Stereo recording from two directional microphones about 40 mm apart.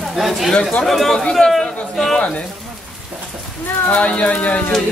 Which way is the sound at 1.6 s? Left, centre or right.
Centre.